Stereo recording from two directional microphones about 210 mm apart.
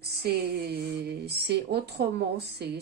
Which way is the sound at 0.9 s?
50° right (ahead or behind).